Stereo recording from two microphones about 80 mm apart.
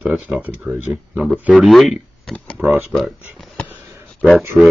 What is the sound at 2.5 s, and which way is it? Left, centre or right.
Speech, right.